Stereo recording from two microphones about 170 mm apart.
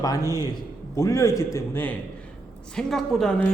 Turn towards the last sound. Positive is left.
turn(degrees=5)  # may be behind; listen again after turning